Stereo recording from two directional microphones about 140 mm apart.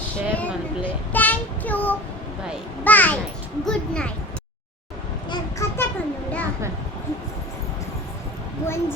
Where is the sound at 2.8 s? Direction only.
10° left (ahead or behind).